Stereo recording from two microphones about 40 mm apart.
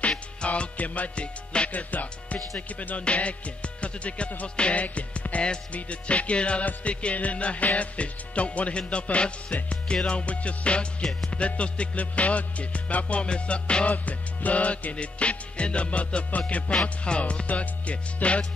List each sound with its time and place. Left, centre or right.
0.5 s music: left
1.7 s music: left
13.9 s music: left